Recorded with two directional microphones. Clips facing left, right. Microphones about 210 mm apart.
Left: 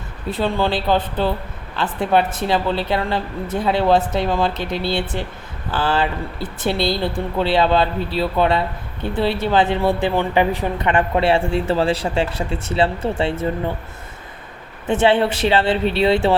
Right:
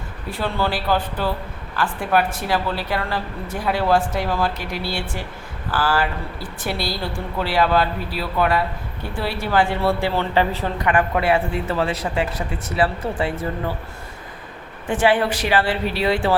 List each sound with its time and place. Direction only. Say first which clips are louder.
0.3 s speech: left 4 dB; 20° left (ahead or behind)
14.8 s speech: left 2 dB; 25° left (ahead or behind)